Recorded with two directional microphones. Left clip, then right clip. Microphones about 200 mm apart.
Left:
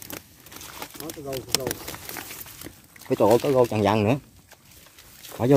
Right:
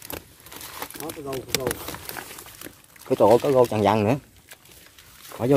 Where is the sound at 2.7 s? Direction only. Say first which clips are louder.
Even; centre (ahead or behind).